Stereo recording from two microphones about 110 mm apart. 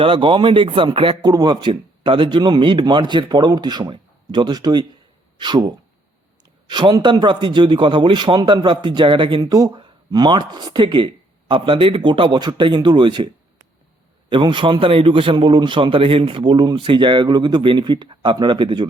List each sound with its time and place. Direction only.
0.0 s a man's voice: 50° right (ahead or behind)
1.2 s a man's voice: 40° right (ahead or behind)
9.4 s a man's voice: 35° right (ahead or behind)